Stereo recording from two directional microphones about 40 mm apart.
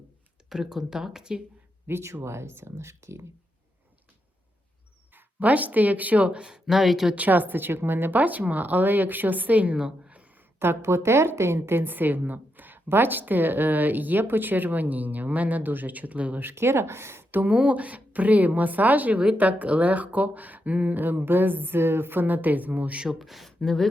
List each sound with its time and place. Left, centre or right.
0.5 s speech: centre
1.9 s speech: right
2.3 s speech: right
5.4 s a woman's voice: right
6.4 s speech: centre
7.2 s a woman's voice: right
8.1 s a woman's voice: right
9.7 s a sound: right
10.6 s a woman's voice: right
16.4 s speech: right
17.4 s a woman's voice: right
21.0 s a woman's voice: right
23.0 s speech: centre